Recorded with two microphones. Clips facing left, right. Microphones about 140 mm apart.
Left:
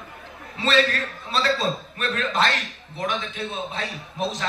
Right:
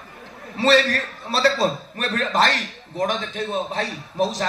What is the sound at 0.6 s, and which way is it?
A man's voice, 35° right (ahead or behind).